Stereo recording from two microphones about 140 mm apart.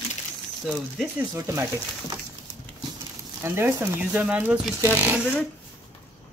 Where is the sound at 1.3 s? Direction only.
25° right (ahead or behind).